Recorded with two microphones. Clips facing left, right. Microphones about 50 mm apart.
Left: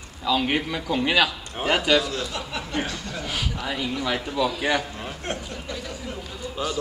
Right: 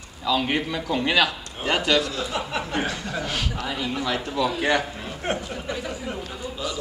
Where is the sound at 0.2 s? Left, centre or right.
Centre.